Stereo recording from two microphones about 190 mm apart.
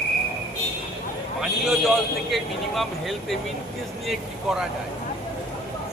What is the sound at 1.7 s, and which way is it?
Speech, centre (ahead or behind).